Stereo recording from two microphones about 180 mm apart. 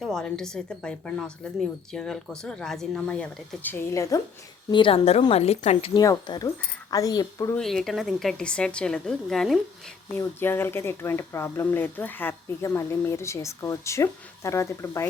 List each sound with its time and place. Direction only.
0.0 s a woman's voice: 5° left (ahead or behind)
4.7 s a woman's voice: 30° left (ahead or behind)
6.0 s speech: 20° left (ahead or behind)
7.6 s a woman's voice: centre (ahead or behind)